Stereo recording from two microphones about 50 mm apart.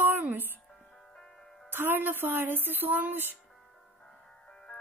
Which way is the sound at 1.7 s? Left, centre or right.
Right.